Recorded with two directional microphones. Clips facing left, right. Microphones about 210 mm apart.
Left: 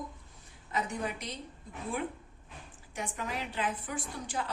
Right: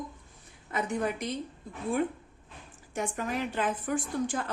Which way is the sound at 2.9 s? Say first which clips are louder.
Right 5 dB; 50° right (ahead or behind).